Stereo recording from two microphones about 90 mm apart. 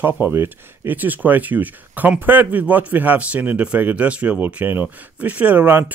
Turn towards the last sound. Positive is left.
turn(degrees=-20)  # may be behind; listen again after turning